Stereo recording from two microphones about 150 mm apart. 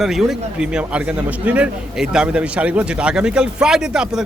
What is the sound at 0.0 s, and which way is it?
A man's voice, centre (ahead or behind).